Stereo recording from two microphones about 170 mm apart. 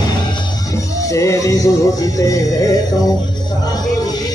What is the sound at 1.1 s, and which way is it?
Speech, 15° left (ahead or behind).